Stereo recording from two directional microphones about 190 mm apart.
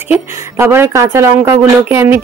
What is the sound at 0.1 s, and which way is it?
Speech, 10° right (ahead or behind).